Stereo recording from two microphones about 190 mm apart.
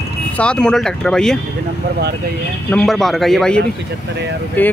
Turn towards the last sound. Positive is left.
turn(degrees=10)  # may be behind; listen again after turning